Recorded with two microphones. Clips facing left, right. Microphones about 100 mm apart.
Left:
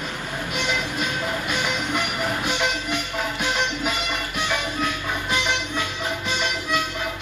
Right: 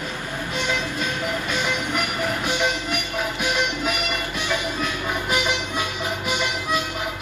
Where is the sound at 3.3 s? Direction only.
15° right (ahead or behind).